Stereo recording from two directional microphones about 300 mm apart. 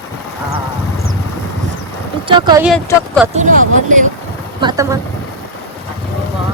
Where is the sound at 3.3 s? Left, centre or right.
Right.